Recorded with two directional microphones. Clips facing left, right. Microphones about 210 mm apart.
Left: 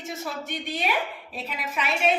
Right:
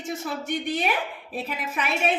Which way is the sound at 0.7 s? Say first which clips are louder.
Right 2 dB; 50° right (ahead or behind).